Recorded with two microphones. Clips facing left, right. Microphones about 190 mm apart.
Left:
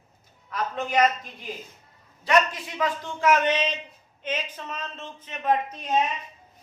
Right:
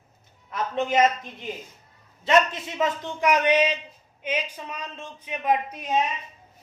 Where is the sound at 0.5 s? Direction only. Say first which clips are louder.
Right 2 dB; 25° right (ahead or behind).